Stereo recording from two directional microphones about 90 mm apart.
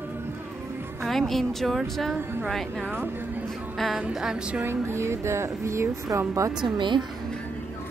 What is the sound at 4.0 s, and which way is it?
Music, 10° right (ahead or behind).